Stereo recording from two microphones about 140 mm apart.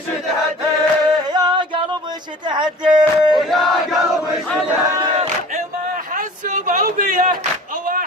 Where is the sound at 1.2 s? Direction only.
30° right (ahead or behind).